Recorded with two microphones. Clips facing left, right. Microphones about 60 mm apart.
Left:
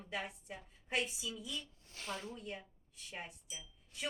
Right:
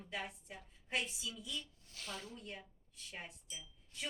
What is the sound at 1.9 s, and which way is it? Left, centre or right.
Speech, left.